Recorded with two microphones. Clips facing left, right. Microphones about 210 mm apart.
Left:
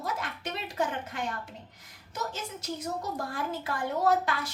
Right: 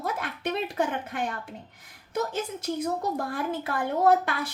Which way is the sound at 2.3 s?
55° right (ahead or behind).